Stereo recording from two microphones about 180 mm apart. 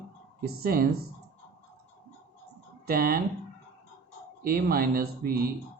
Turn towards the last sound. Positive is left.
turn(degrees=-55)  # may be behind; listen again after turning